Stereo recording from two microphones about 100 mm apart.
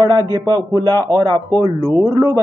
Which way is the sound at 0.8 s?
35° right (ahead or behind).